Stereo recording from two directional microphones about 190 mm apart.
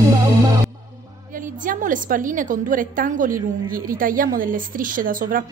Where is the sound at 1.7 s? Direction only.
45° right (ahead or behind).